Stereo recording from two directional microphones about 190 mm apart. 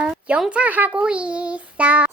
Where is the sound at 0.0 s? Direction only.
5° right (ahead or behind).